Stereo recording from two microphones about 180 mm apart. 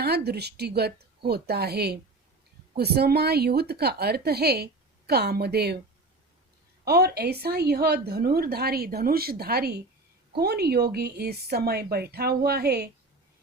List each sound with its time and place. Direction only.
0.3 s a woman's voice: 65° right (ahead or behind)
6.8 s a woman's voice: 60° right (ahead or behind)